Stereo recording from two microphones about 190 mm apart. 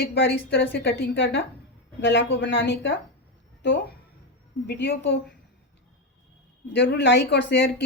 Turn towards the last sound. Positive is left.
turn(degrees=65)  # may be behind; listen again after turning